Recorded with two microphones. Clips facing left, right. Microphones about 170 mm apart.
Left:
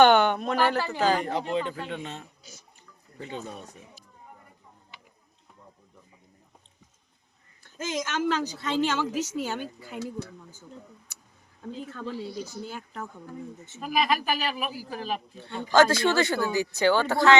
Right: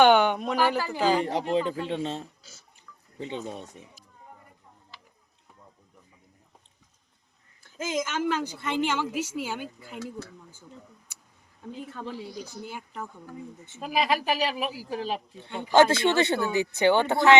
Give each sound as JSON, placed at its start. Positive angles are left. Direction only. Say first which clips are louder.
{"t": 0.0, "sound": "speech", "louder": "even", "side_deg": -10}
{"t": 1.2, "sound": "a man's voice", "louder": "right 2 dB", "side_deg": -35}
{"t": 2.4, "sound": "speech", "louder": "left 4 dB", "side_deg": 15}
{"t": 3.2, "sound": "speech", "louder": "right 3 dB", "side_deg": -25}
{"t": 7.6, "sound": "a woman's voice", "louder": "right 2 dB", "side_deg": -10}
{"t": 11.7, "sound": "speech", "louder": "left 1 dB", "side_deg": -15}
{"t": 13.8, "sound": "speech", "louder": "even", "side_deg": -30}
{"t": 15.4, "sound": "speech", "louder": "right 1 dB", "side_deg": -15}